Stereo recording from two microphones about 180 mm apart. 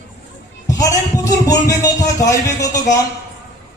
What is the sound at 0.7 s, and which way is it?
A man's voice, 20° left (ahead or behind).